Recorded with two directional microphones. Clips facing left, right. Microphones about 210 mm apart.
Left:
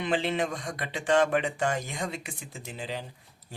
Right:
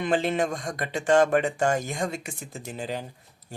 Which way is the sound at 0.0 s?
45° right (ahead or behind).